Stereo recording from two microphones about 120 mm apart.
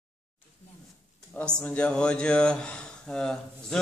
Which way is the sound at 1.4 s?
10° left (ahead or behind).